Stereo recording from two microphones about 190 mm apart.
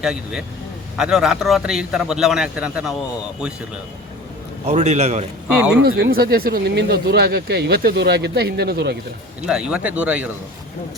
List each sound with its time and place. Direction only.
0.0 s a man's voice: 5° right (ahead or behind)
4.6 s a man's voice: 35° right (ahead or behind)
5.5 s a man's voice: 5° right (ahead or behind)
5.7 s speech: 65° right (ahead or behind)
9.5 s speech: 5° right (ahead or behind)